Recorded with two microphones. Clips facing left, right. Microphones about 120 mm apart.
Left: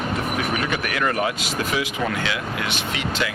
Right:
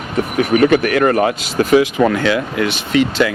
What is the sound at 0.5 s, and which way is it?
Speech, 50° right (ahead or behind).